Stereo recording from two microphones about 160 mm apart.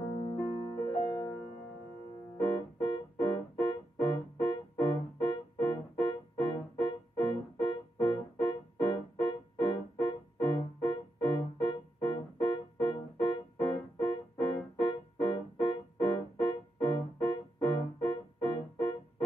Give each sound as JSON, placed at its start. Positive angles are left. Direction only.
{"t": 0.3, "sound": "music", "side_deg": 30}
{"t": 2.4, "sound": "keyboard", "side_deg": 30}
{"t": 6.4, "sound": "music", "side_deg": 30}
{"t": 12.8, "sound": "keyboard", "side_deg": 30}